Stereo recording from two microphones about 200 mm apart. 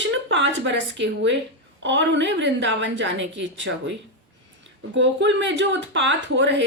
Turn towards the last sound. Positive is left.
turn(degrees=-65)  # may be behind; listen again after turning